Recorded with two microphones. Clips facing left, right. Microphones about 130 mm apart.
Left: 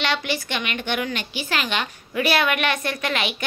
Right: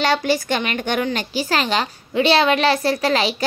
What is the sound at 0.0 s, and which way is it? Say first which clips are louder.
A woman's voice: right 6 dB; 40° right (ahead or behind).